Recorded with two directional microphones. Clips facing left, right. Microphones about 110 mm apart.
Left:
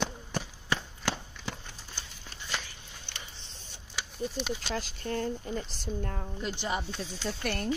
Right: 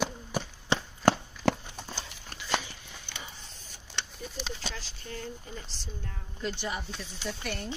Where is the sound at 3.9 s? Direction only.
Centre (ahead or behind).